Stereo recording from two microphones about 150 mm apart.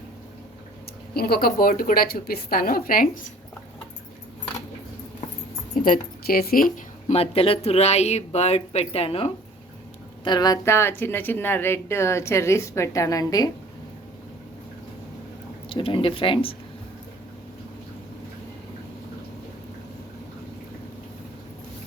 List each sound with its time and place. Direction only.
1.1 s a woman's voice: 90° left; by 3.3 s 65° left (ahead or behind)
5.8 s speech: 75° left (ahead or behind)
7.1 s speech: 40° left (ahead or behind)
10.2 s a woman's voice: 25° left (ahead or behind)
15.7 s speech: 35° left (ahead or behind)